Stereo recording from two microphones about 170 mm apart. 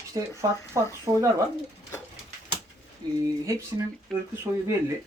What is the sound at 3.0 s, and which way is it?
Speech, 25° right (ahead or behind).